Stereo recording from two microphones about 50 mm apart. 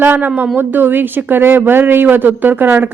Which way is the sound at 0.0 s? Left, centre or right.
Right.